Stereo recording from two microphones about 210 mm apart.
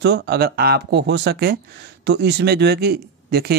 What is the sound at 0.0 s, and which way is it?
Speech, 50° right (ahead or behind).